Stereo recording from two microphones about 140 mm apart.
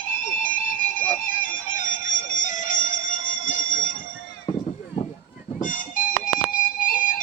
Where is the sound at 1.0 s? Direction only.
70° left (ahead or behind).